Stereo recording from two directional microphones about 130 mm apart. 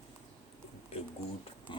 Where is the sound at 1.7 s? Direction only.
40° left (ahead or behind).